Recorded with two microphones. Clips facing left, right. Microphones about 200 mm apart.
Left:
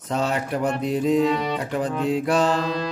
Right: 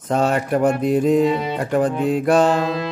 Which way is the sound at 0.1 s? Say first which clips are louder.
Right 6 dB; 50° right (ahead or behind).